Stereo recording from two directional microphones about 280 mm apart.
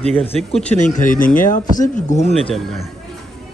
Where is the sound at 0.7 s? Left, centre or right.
Left.